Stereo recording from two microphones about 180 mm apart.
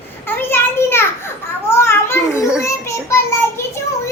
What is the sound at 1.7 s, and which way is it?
Children playing, 15° left (ahead or behind).